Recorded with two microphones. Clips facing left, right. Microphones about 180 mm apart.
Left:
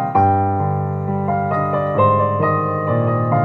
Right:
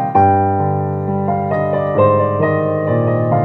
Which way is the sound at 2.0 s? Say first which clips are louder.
Right 5 dB; 60° right (ahead or behind).